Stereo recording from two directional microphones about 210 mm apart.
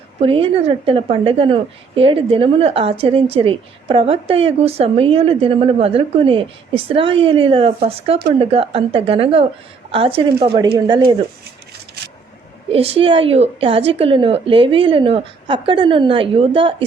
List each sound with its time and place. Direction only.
0.2 s speech: 25° right (ahead or behind)
12.7 s speech: 25° right (ahead or behind)